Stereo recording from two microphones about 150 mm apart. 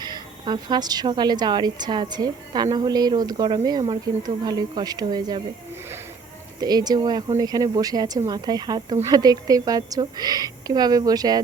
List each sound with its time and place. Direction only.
0.0 s a woman's voice: 30° right (ahead or behind)
6.6 s a woman's voice: 25° right (ahead or behind)